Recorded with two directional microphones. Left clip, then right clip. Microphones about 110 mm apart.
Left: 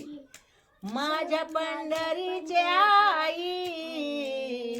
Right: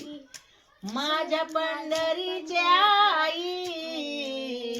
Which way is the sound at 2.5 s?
25° left (ahead or behind).